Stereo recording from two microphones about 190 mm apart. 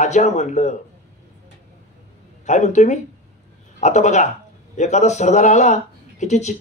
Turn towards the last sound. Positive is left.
turn(degrees=40)  # may be behind; listen again after turning